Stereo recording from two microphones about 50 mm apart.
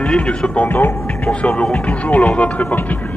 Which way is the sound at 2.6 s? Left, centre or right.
Left.